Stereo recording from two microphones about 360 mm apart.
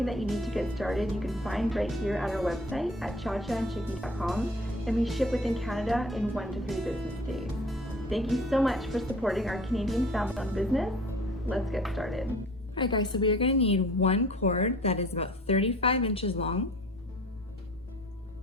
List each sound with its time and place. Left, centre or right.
0.0 s a woman's voice: centre
12.7 s a woman's voice: centre